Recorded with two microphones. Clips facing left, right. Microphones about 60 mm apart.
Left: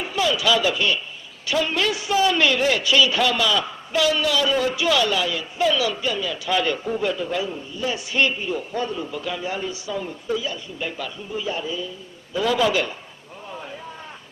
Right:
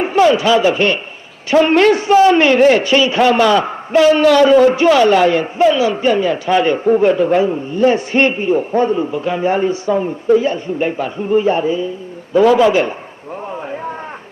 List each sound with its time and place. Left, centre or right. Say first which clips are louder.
0.0 s speech: right 11 dB; right
1.5 s a man's voice: right 12 dB; right
5.6 s a man's voice: right 8 dB; right
13.5 s a sound: right 8 dB; right